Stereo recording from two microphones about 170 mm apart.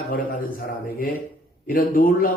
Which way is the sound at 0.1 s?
55° left (ahead or behind).